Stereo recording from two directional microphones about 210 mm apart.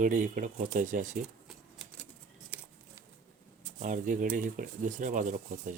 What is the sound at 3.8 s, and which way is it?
Speech, 40° right (ahead or behind).